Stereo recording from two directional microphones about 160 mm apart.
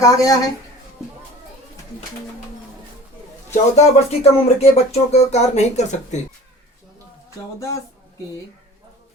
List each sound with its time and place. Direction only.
0.0 s speech: 20° left (ahead or behind)
3.5 s speech: 45° left (ahead or behind)